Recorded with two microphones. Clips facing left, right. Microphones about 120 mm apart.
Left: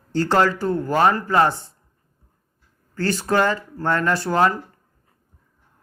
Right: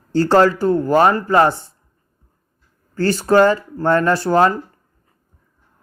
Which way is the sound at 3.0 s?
30° right (ahead or behind).